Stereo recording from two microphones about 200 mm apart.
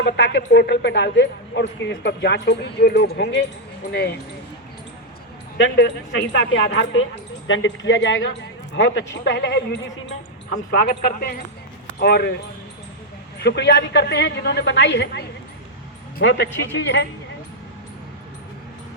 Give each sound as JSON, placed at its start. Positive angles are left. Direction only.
{"t": 0.0, "sound": "speech", "side_deg": 60}
{"t": 5.5, "sound": "speech", "side_deg": 60}
{"t": 10.5, "sound": "a man's voice", "side_deg": 45}
{"t": 13.4, "sound": "speech", "side_deg": 60}
{"t": 16.2, "sound": "speech", "side_deg": 60}